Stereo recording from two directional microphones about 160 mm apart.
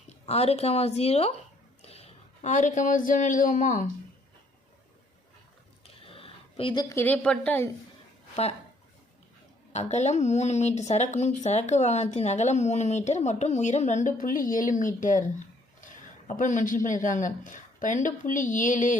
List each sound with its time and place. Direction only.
0.1 s a woman's voice: 40° left (ahead or behind)
5.8 s a sound: 35° left (ahead or behind)
6.8 s a woman's voice: 15° left (ahead or behind)
9.7 s speech: 45° left (ahead or behind)